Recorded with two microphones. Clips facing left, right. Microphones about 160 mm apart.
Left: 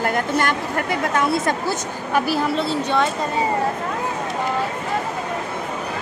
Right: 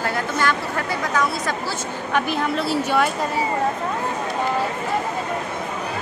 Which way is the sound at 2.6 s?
10° right (ahead or behind).